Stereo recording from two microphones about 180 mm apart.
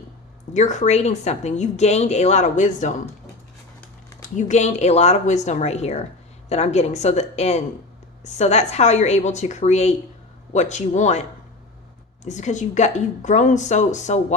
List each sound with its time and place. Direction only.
0.5 s a woman's voice: 40° left (ahead or behind)
4.2 s a woman's voice: 45° left (ahead or behind)
12.2 s a woman's voice: 40° left (ahead or behind)